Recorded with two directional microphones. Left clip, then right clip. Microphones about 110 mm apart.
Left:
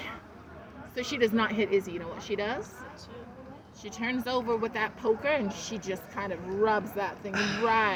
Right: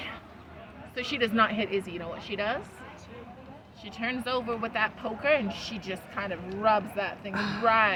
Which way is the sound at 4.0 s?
25° right (ahead or behind).